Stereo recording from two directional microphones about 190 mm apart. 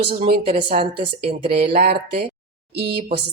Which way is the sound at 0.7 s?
30° right (ahead or behind).